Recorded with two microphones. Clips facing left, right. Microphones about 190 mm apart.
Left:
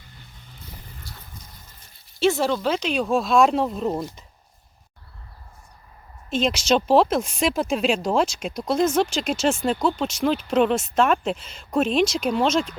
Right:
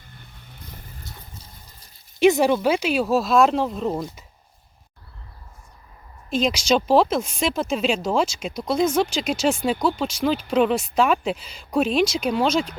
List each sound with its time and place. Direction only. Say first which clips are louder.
1.1 s water: right 1 dB; 20° right (ahead or behind)
2.1 s speech: right 4 dB; 15° right (ahead or behind); by 4.0 s centre (ahead or behind)
6.3 s speech: even; centre (ahead or behind)